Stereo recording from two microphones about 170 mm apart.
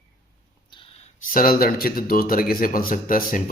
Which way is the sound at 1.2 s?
55° left (ahead or behind).